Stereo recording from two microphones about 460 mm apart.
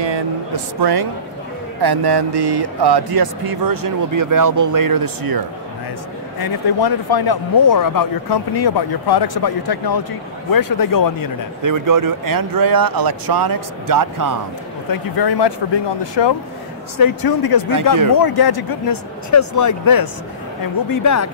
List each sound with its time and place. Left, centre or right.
0.0 s speech: right
6.4 s speech: left
11.6 s speech: right
14.9 s speech: left
17.0 s speech: left
19.3 s speech: left